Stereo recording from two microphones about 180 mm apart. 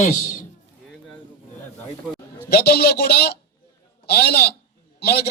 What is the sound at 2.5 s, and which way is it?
A man's voice, 60° left (ahead or behind).